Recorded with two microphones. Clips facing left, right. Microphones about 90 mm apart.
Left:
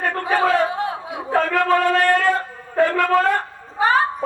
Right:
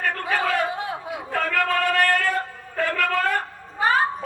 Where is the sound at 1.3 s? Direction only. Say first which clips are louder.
Left 6 dB; 25° left (ahead or behind).